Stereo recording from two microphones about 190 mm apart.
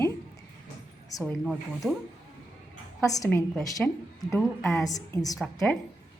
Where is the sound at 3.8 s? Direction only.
5° left (ahead or behind).